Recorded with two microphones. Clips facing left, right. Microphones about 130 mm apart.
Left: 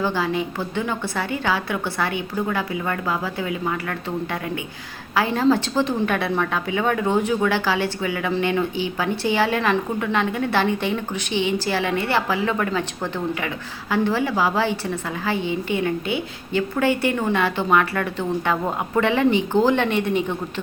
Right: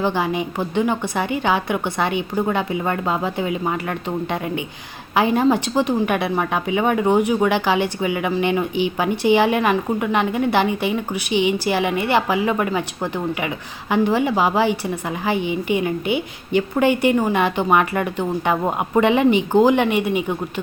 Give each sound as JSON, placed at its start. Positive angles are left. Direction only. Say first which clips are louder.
{"t": 0.0, "sound": "a woman's voice", "louder": "right 2 dB", "side_deg": -20}